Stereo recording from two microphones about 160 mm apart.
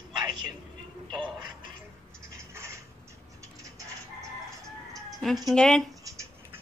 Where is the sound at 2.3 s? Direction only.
15° right (ahead or behind).